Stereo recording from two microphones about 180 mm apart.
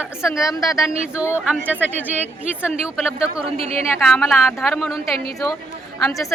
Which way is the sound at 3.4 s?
35° right (ahead or behind).